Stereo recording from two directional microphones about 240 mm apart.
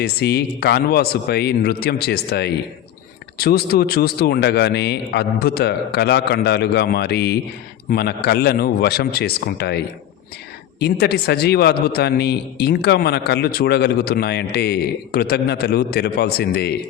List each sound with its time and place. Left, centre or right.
0.0 s a man's voice: left